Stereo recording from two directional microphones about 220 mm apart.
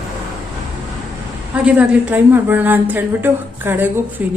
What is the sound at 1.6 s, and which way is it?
A woman's voice, 10° right (ahead or behind).